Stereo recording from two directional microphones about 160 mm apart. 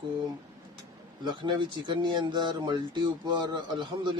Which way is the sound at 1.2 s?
30° right (ahead or behind).